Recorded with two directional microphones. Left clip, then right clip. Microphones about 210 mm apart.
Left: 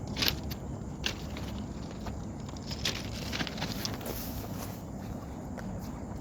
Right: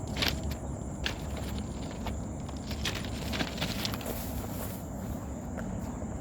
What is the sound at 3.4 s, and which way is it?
Vehicle, 10° right (ahead or behind).